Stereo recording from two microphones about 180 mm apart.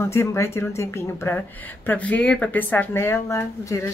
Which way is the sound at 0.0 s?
15° left (ahead or behind).